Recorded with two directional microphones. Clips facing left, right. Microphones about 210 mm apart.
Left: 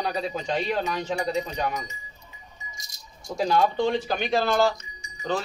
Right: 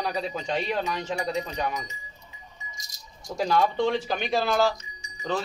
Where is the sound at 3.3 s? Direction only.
Centre (ahead or behind).